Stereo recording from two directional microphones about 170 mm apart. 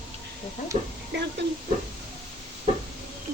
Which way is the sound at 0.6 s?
45° left (ahead or behind).